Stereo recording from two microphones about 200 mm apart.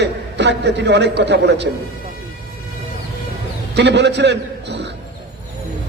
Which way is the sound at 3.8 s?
60° right (ahead or behind).